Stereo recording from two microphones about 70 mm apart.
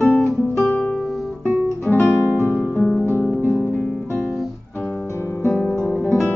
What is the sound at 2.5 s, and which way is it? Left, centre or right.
Music, centre.